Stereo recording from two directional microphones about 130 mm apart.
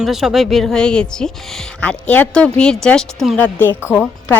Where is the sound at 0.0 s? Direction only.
Centre (ahead or behind).